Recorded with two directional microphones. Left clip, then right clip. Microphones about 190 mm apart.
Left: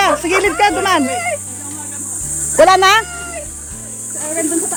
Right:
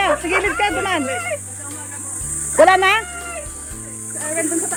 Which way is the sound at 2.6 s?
5° left (ahead or behind).